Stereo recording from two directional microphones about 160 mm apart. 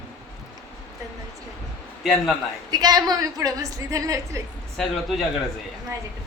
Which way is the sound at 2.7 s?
25° right (ahead or behind).